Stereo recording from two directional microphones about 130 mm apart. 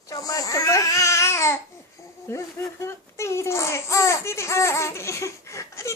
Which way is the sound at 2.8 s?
20° left (ahead or behind).